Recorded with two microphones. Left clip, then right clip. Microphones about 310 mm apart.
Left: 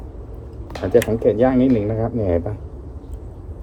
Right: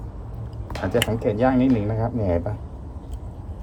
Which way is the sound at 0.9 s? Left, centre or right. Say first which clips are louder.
Left 7 dB; centre.